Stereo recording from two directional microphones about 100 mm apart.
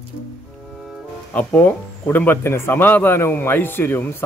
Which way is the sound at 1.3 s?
15° left (ahead or behind).